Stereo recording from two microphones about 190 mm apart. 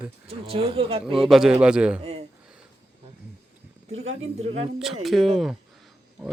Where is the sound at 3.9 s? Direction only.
90° right.